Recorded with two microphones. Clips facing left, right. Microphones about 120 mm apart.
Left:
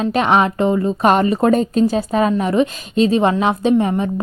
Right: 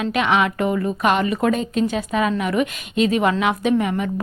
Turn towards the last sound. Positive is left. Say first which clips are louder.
# left 4 dB
turn(degrees=30)  # may be behind; listen again after turning